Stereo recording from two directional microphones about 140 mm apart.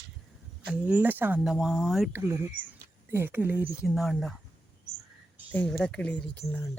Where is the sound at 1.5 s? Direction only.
Centre (ahead or behind).